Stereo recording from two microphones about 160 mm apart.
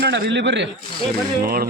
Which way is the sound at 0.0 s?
90° right.